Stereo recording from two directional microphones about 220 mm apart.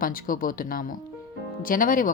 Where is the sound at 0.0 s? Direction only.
40° left (ahead or behind).